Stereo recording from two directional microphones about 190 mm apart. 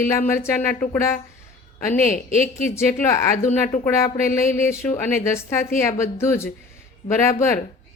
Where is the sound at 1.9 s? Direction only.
45° left (ahead or behind).